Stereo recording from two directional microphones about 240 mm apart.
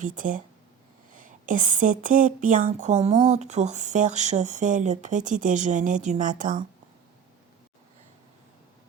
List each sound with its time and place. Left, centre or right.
0.0 s speech: right